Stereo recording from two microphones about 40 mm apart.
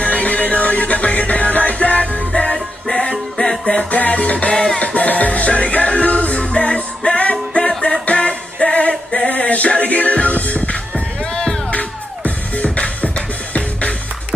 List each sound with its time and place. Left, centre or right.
0.0 s music: left
3.9 s music: left
12.5 s music: left